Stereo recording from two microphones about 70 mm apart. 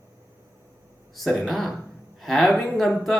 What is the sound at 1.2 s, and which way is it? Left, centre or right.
A man's voice, centre.